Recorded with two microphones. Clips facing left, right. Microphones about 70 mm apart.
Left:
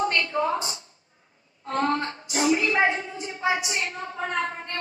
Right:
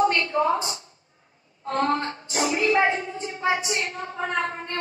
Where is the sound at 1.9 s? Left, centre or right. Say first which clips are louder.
Right 1 dB; right.